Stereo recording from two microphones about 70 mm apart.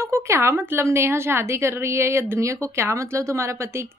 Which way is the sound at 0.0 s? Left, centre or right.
Right.